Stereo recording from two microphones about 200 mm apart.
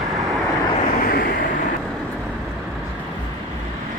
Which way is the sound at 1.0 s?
50° left (ahead or behind).